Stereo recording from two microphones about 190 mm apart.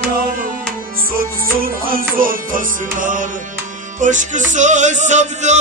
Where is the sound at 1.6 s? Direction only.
50° right (ahead or behind).